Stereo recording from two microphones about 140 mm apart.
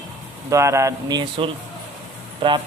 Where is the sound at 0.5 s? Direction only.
20° right (ahead or behind).